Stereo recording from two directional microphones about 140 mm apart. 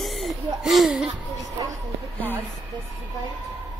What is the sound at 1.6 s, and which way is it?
Speech, 25° right (ahead or behind).